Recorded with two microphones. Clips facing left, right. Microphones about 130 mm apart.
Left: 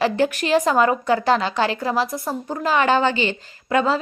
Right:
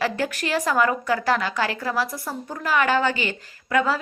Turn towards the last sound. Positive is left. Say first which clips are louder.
# left 2 dB
turn(degrees=25)  # may be behind; listen again after turning